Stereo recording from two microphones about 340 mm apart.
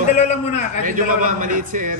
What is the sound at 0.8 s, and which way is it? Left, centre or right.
A man's voice, right.